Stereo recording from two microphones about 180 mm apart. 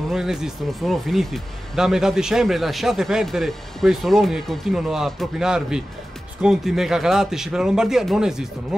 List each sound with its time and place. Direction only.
0.1 s speech: centre (ahead or behind)